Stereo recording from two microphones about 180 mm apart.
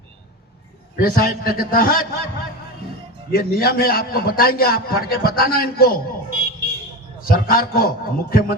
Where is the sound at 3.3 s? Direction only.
55° left (ahead or behind).